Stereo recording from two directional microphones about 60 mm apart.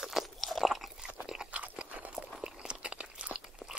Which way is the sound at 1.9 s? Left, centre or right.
Right.